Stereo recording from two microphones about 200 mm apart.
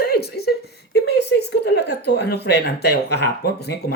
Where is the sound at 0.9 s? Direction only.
55° left (ahead or behind).